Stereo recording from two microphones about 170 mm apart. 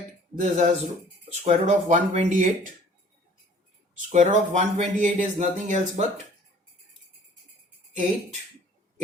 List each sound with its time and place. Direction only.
0.3 s speech: 45° right (ahead or behind)
4.1 s speech: 45° right (ahead or behind)